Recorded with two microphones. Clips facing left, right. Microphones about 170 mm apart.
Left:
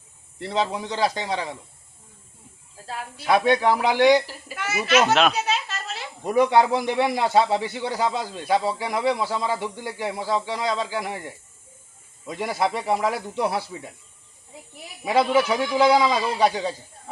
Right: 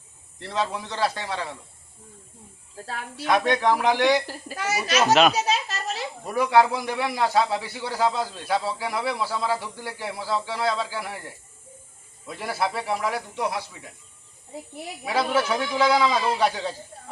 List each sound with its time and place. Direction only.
0.3 s a man's voice: 15° left (ahead or behind)
3.2 s a man's voice: 10° left (ahead or behind)
4.5 s a child's voice: 40° right (ahead or behind)
5.4 s a sound: 40° right (ahead or behind)
6.2 s a man's voice: 20° left (ahead or behind)
12.3 s speech: 20° left (ahead or behind)
15.1 s a man's voice: 15° left (ahead or behind)